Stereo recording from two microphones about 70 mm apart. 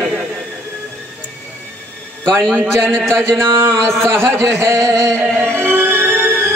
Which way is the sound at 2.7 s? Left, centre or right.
Centre.